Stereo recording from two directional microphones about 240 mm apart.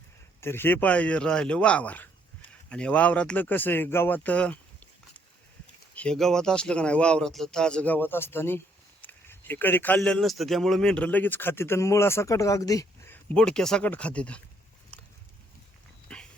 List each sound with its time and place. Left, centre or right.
0.4 s speech: centre
5.9 s speech: centre
16.1 s dog: centre